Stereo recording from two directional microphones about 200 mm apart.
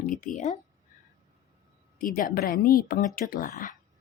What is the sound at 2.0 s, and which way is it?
Speech, 45° left (ahead or behind).